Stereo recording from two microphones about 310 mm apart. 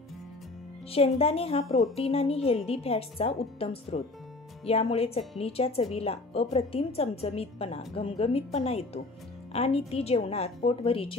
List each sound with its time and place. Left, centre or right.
0.9 s speech: centre